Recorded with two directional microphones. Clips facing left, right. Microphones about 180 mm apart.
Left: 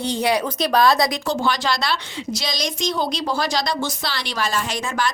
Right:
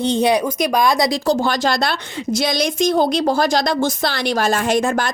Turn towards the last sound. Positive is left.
turn(degrees=-50)  # may be behind; listen again after turning